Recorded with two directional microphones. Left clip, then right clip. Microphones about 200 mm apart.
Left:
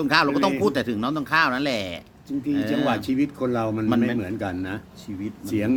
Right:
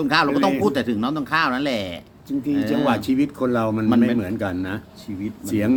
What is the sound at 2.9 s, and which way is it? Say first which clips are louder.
Speech: right 3 dB; 15° right (ahead or behind).